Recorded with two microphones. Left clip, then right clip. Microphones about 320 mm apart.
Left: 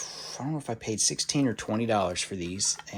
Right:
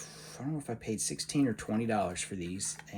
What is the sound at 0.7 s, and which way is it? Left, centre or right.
Speech, left.